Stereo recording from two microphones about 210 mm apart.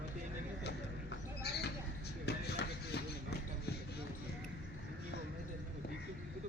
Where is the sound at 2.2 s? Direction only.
50° left (ahead or behind).